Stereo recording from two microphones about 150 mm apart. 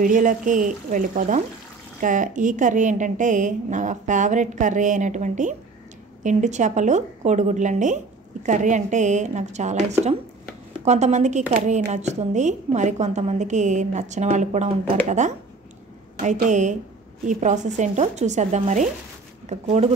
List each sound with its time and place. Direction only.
0.0 s a woman's voice: 60° right (ahead or behind)
10.9 s a woman's voice: 50° right (ahead or behind)